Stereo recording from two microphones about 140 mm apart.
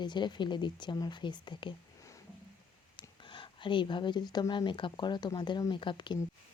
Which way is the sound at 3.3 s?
35° left (ahead or behind).